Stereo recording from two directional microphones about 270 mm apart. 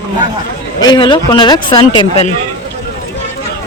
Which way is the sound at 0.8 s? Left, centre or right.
Centre.